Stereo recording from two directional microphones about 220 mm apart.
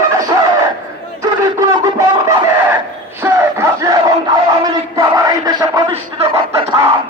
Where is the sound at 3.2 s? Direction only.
10° right (ahead or behind).